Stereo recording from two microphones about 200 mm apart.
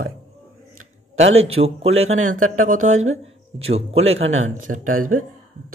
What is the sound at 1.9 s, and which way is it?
Speech, 90° right.